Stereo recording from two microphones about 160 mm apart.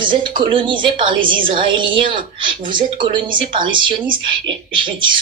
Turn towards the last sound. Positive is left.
turn(degrees=-30)  # may be behind; listen again after turning